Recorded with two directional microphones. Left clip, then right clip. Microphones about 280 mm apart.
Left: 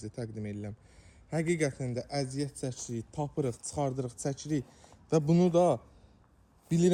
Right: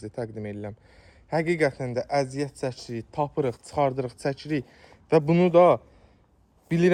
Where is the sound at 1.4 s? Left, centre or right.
Centre.